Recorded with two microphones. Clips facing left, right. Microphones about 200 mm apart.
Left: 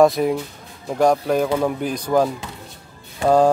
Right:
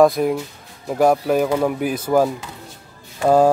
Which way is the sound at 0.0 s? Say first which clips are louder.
Right 1 dB; centre (ahead or behind).